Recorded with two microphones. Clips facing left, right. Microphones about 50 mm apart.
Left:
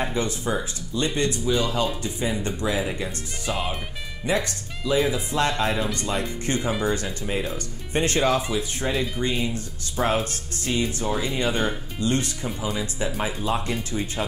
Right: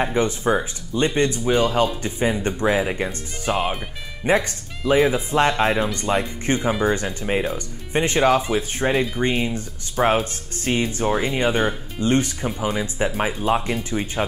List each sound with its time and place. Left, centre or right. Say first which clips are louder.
0.1 s speech: right 6 dB; right
10.6 s speech: right 4 dB; right